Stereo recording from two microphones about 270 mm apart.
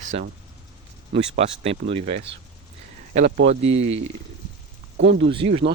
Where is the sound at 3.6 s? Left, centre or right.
Right.